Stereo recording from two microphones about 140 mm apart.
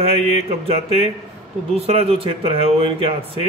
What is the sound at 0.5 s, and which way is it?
Speech, 45° right (ahead or behind).